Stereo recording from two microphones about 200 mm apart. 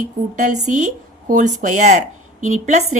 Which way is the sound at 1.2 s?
40° right (ahead or behind).